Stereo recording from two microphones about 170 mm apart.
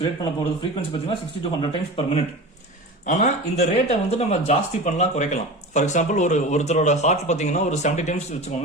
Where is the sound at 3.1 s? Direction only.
45° left (ahead or behind).